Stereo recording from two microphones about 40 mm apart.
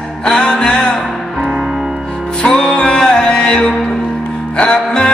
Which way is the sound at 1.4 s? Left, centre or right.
Centre.